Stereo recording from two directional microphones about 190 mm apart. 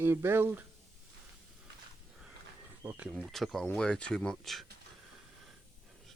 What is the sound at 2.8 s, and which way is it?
Speech, 15° right (ahead or behind).